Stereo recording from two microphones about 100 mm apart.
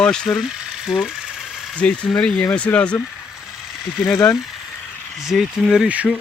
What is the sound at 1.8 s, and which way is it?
Speech, 10° left (ahead or behind).